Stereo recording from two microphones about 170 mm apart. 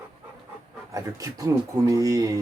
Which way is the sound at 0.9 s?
20° right (ahead or behind).